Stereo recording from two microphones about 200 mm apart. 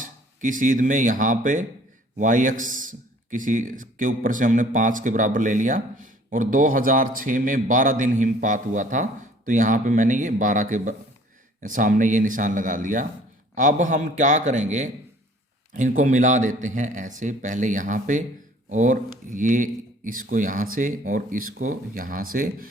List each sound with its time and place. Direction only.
0.0 s a man's voice: 40° right (ahead or behind)